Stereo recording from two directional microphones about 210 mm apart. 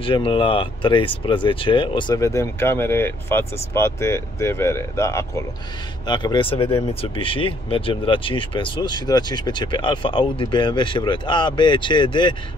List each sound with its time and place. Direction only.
0.0 s speech: 25° left (ahead or behind)